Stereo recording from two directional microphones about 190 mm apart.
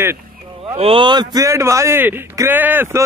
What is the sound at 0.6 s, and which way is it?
A man's voice, 30° right (ahead or behind).